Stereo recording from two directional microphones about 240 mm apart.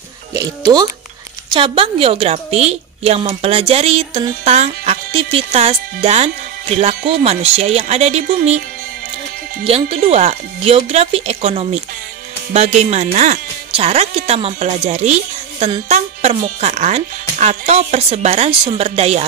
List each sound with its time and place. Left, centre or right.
0.3 s a woman's voice: centre
9.7 s a woman's voice: right